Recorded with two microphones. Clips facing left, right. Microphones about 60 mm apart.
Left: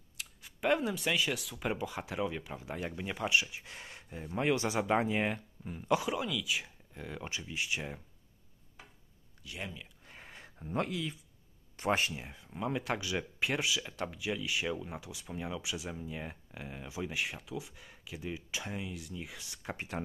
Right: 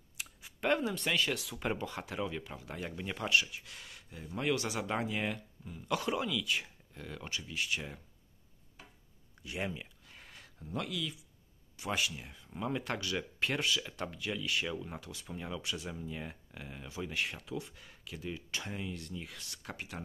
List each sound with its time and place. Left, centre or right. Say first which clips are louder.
0.6 s speech: left 1 dB; centre
3.3 s speech: right 2 dB; left
5.9 s speech: right 1 dB; centre
6.9 s speech: left 3 dB; centre
10.0 s a sound: left 3 dB; left
11.7 s speech: left 4 dB; left
12.2 s speech: left 3 dB; left
12.4 s speech: left 2 dB; centre; by 20.0 s left